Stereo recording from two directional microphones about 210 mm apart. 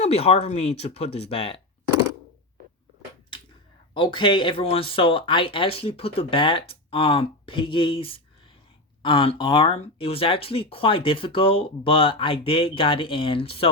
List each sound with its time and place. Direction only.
0.0 s speech: 30° left (ahead or behind)
3.9 s speech: 25° left (ahead or behind)